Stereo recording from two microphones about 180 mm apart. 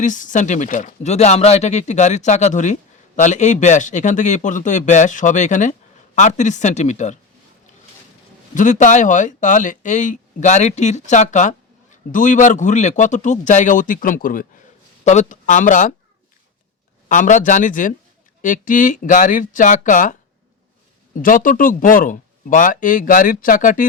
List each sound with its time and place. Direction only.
0.0 s speech: 45° left (ahead or behind)
8.5 s speech: 45° left (ahead or behind)
17.1 s speech: 45° left (ahead or behind)
21.2 s speech: 50° left (ahead or behind)